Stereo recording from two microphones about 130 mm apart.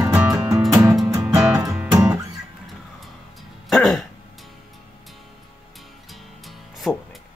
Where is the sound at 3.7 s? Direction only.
5° left (ahead or behind).